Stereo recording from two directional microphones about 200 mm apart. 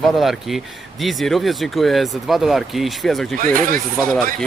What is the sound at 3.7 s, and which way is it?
Speech, 5° left (ahead or behind).